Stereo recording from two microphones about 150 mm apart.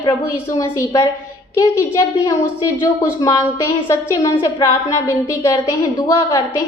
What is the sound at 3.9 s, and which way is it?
A woman's voice, 20° left (ahead or behind).